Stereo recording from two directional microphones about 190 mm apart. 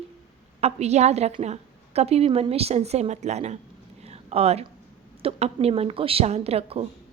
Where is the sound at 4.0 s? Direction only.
35° right (ahead or behind).